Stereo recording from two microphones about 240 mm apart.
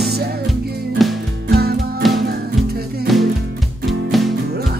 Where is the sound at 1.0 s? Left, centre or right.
Centre.